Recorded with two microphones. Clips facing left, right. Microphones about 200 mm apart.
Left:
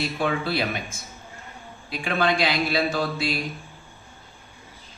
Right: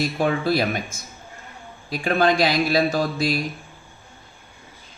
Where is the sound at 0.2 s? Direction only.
45° right (ahead or behind).